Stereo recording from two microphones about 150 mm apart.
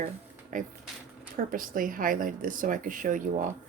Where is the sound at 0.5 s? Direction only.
60° right (ahead or behind).